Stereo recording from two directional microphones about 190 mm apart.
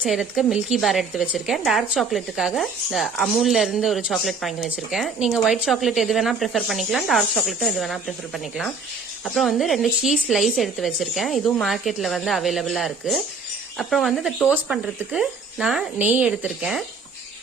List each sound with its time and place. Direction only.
0.0 s speech: centre (ahead or behind)